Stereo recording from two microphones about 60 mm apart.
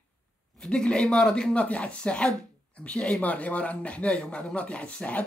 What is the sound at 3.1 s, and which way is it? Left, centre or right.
Speech, left.